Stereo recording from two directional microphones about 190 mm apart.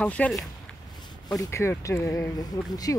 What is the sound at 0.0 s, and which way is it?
Speech, 5° left (ahead or behind).